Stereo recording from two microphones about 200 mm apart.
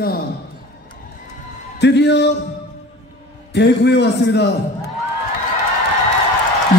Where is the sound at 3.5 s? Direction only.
55° left (ahead or behind).